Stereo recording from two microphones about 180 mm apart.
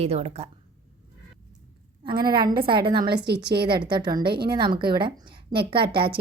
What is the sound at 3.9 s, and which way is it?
A woman's voice, 25° right (ahead or behind).